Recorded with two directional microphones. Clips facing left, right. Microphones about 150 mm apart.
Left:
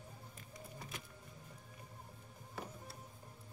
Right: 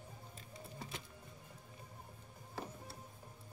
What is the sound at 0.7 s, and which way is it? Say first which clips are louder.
Music: right 2 dB; 30° right (ahead or behind).